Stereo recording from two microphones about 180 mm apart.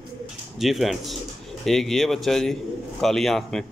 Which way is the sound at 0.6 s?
Centre (ahead or behind).